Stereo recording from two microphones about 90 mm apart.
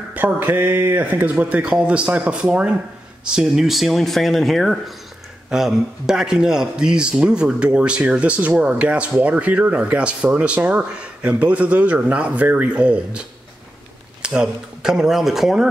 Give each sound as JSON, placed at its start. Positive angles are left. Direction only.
{"t": 0.1, "sound": "speech", "side_deg": -20}